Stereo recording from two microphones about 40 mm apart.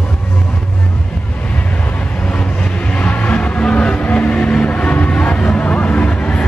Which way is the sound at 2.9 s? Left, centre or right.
Left.